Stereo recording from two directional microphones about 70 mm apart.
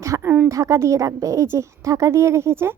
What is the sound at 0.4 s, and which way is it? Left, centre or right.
A woman's voice, right.